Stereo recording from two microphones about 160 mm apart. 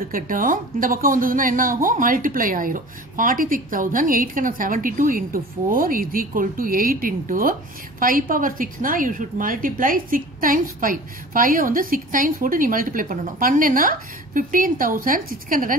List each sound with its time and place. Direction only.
0.1 s a woman's voice: 60° right (ahead or behind)